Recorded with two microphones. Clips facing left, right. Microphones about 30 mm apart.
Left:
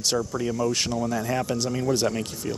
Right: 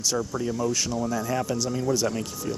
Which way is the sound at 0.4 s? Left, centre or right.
Left.